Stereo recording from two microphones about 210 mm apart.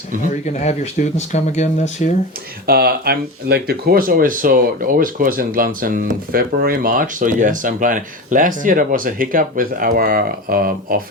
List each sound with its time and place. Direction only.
0.4 s speech: 30° left (ahead or behind)
2.6 s speech: 50° right (ahead or behind)